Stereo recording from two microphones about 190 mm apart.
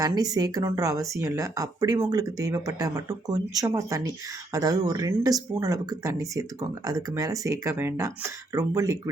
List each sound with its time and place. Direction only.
0.0 s speech: 20° right (ahead or behind)